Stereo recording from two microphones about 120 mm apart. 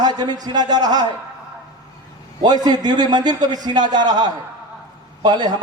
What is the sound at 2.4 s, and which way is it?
A man's voice, 35° right (ahead or behind).